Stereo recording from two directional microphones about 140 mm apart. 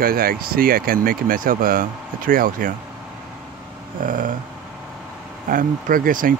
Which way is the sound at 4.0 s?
75° right (ahead or behind).